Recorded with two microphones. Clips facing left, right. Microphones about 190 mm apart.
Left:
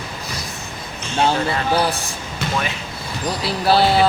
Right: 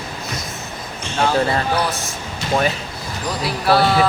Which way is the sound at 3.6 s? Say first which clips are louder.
Even; 25° left (ahead or behind).